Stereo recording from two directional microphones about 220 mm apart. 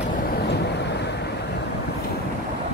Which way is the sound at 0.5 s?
50° left (ahead or behind).